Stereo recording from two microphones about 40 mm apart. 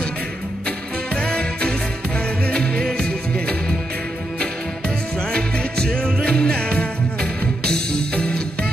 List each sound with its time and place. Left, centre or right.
0.7 s music: left